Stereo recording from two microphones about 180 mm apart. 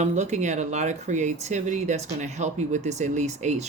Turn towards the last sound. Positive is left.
turn(degrees=-40)  # may be behind; listen again after turning